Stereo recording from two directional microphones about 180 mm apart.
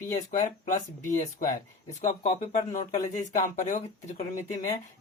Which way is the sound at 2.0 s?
40° left (ahead or behind).